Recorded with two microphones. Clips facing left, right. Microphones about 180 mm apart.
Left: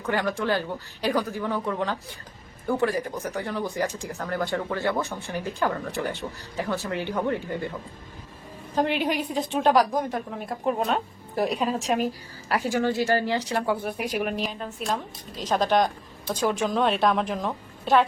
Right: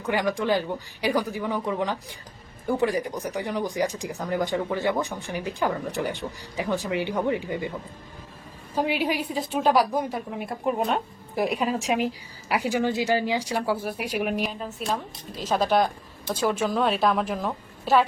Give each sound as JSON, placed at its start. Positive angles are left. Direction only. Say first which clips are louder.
{"t": 0.0, "sound": "speech", "louder": "right 1 dB", "side_deg": -15}
{"t": 8.7, "sound": "a woman's voice", "louder": "left 1 dB", "side_deg": -5}